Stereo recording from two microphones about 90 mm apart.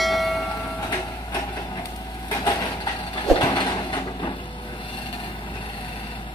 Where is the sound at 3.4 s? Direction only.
60° left (ahead or behind).